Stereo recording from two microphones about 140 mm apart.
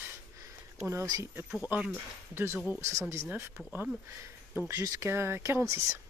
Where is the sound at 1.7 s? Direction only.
15° right (ahead or behind).